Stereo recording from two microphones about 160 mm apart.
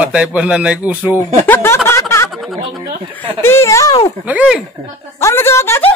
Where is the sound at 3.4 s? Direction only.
15° left (ahead or behind).